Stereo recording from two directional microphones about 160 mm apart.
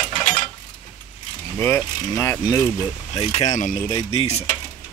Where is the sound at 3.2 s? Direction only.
40° left (ahead or behind).